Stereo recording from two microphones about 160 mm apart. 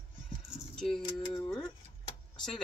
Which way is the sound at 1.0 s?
25° left (ahead or behind).